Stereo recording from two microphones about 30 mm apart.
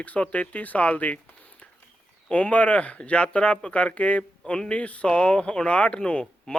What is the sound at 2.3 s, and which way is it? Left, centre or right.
Speech, left.